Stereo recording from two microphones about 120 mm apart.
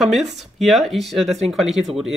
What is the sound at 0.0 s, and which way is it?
Speech, centre (ahead or behind).